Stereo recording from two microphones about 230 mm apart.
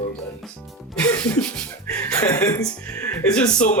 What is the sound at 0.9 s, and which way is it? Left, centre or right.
Music, centre.